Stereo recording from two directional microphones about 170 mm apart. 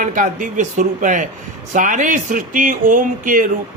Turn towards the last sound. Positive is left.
turn(degrees=-50)  # may be behind; listen again after turning